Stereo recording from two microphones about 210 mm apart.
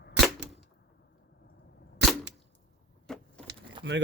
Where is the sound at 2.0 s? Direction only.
55° right (ahead or behind).